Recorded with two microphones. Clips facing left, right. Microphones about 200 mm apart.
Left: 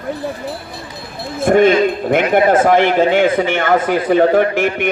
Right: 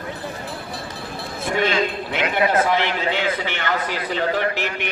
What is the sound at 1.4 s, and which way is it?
A man's voice, 50° left (ahead or behind).